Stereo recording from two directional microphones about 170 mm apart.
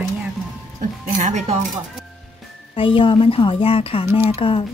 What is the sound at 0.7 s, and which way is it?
Speech, 50° right (ahead or behind).